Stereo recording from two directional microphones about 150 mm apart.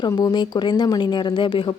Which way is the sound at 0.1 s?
30° left (ahead or behind).